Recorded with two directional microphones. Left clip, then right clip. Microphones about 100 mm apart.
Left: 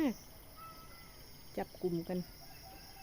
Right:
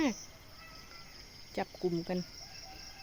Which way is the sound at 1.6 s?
5° right (ahead or behind).